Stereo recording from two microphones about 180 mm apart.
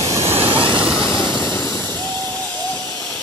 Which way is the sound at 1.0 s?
15° left (ahead or behind).